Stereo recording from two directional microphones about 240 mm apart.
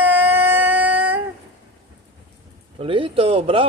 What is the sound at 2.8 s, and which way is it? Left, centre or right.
Speech, right.